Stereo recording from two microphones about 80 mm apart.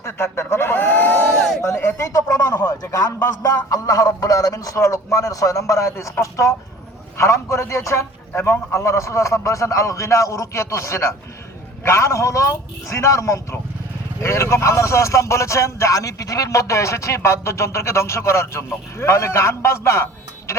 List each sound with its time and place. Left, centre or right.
0.0 s a sound: left
1.6 s speech: left
2.1 s a man's voice: left
2.6 s speech: left
2.9 s a man's voice: left
20.5 s a sound: left